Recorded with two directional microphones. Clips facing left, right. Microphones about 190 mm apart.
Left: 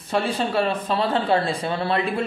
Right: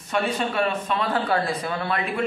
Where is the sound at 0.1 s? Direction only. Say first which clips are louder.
Left 2 dB; 30° left (ahead or behind).